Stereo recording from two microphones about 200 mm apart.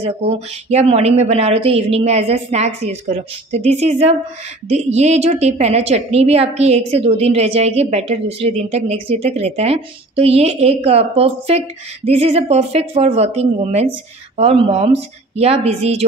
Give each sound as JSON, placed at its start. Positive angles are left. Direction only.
{"t": 0.0, "sound": "a woman's voice", "side_deg": -30}